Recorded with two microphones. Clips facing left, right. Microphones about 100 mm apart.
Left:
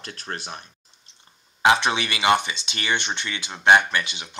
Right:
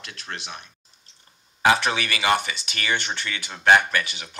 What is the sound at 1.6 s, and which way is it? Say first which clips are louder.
Speech: left 1 dB; 20° left (ahead or behind).